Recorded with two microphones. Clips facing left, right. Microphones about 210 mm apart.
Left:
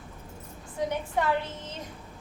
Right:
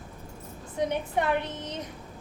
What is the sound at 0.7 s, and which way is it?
A woman's voice, 20° right (ahead or behind).